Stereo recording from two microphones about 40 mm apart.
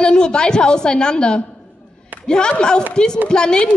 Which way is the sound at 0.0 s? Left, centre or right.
Left.